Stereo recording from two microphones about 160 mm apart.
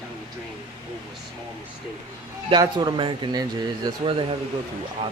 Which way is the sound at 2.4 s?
25° right (ahead or behind).